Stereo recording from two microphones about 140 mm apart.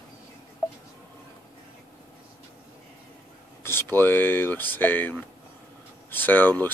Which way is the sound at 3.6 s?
15° left (ahead or behind).